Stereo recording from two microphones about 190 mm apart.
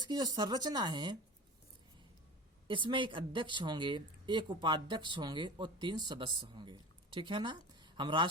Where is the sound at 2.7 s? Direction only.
25° right (ahead or behind).